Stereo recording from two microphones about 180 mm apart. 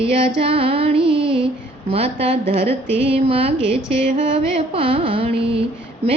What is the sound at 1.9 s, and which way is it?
A woman's voice, 35° right (ahead or behind).